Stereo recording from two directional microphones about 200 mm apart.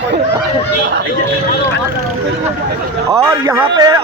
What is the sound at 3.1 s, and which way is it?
Speech, 15° right (ahead or behind).